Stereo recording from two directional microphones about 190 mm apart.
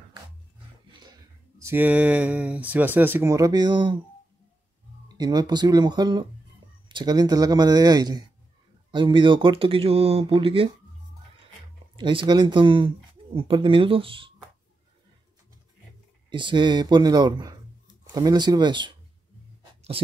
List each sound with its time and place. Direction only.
1.6 s speech: 10° right (ahead or behind)
5.0 s speech: 20° right (ahead or behind)
12.0 s speech: 25° right (ahead or behind)
16.3 s speech: 25° right (ahead or behind)